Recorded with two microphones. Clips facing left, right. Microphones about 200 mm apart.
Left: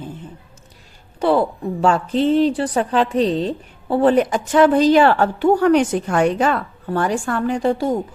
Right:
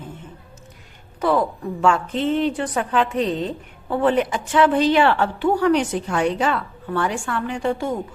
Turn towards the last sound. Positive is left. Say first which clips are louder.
# left 5 dB
turn(degrees=35)  # may be behind; listen again after turning